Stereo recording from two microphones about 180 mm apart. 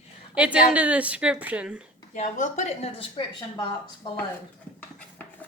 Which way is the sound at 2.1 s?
40° left (ahead or behind).